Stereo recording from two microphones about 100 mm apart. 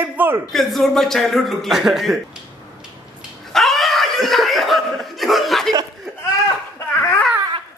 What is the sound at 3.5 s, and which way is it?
Snicker, centre (ahead or behind).